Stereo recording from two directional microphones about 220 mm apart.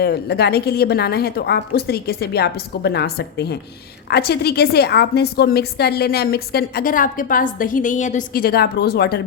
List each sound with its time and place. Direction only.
0.0 s a woman's voice: 45° left (ahead or behind)